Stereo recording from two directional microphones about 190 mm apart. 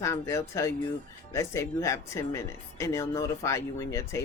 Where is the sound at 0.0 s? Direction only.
15° left (ahead or behind).